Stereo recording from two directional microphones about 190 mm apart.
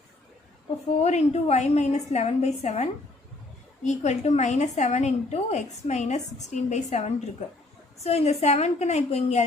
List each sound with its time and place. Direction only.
1.0 s a woman's voice: 35° left (ahead or behind)